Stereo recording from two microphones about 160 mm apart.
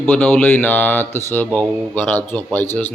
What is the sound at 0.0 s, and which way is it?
Speech, 10° left (ahead or behind).